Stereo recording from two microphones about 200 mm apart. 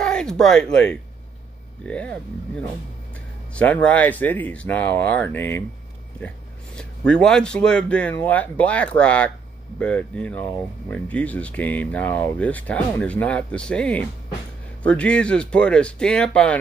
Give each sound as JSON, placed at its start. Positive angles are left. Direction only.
{"t": 0.0, "sound": "a man's voice", "side_deg": 5}